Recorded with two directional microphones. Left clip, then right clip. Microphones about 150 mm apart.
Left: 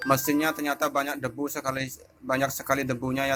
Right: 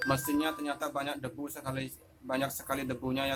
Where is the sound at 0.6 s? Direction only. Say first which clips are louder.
Left 8 dB; 35° left (ahead or behind).